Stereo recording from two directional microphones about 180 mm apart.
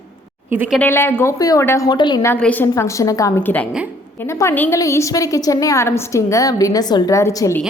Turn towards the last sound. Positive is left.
turn(degrees=15)  # may be behind; listen again after turning